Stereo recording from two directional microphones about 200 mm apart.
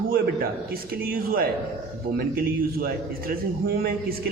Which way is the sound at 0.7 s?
45° right (ahead or behind).